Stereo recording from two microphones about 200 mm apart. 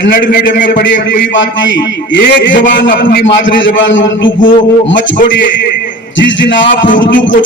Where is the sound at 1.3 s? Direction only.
65° left (ahead or behind).